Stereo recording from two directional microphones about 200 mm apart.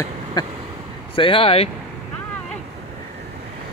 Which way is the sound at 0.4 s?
20° left (ahead or behind).